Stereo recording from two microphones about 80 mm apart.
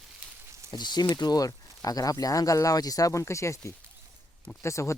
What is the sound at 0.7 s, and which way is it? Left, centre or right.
Speech, left.